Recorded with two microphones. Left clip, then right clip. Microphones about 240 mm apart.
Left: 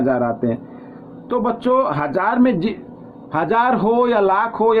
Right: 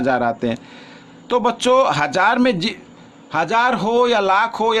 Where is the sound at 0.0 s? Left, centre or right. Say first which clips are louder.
Even; right.